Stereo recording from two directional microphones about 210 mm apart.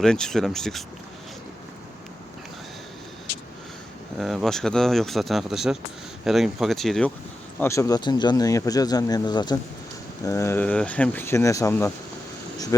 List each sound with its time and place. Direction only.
0.0 s speech: 5° left (ahead or behind)
3.3 s vehicle: 60° left (ahead or behind)
4.2 s speech: centre (ahead or behind)
7.6 s speech: 15° left (ahead or behind)